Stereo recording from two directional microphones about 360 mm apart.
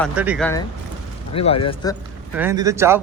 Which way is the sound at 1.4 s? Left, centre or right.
Centre.